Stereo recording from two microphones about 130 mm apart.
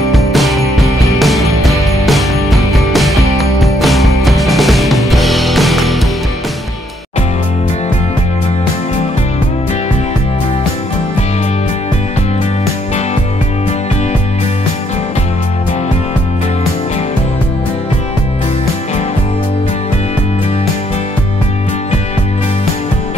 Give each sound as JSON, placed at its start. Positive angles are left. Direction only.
{"t": 0.1, "sound": "music", "side_deg": 0}